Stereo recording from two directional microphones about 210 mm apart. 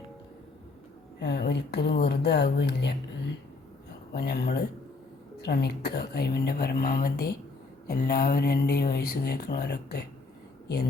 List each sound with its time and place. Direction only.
1.2 s speech: 50° left (ahead or behind)
4.1 s speech: 50° left (ahead or behind)